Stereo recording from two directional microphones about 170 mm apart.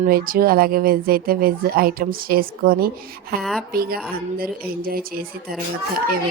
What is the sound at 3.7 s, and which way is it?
Speech, 60° right (ahead or behind).